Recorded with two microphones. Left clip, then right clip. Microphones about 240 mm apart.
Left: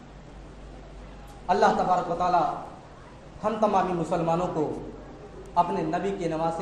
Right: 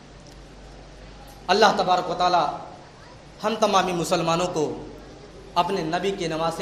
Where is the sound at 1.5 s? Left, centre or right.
Right.